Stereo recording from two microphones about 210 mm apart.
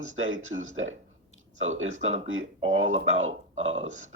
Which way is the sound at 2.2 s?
75° right (ahead or behind).